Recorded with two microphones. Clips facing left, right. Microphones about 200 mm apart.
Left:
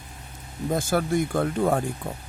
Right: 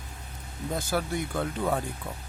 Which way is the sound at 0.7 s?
50° left (ahead or behind).